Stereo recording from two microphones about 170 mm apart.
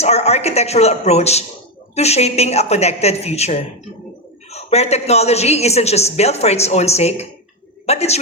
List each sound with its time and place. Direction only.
0.0 s a woman's voice: 40° left (ahead or behind)